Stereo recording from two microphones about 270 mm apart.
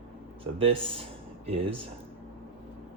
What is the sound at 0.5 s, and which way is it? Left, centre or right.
Speech, right.